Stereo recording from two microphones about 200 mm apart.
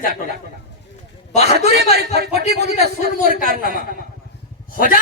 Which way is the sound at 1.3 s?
35° left (ahead or behind).